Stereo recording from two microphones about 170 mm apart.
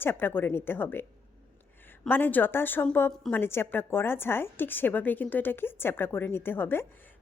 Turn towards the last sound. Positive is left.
turn(degrees=15)  # may be behind; listen again after turning